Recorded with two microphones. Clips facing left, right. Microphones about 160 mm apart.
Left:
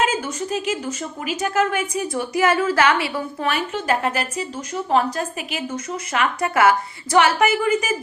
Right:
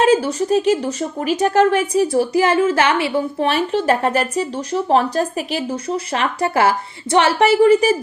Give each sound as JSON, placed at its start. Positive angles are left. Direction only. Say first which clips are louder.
{"t": 0.0, "sound": "speech", "louder": "right 8 dB", "side_deg": -35}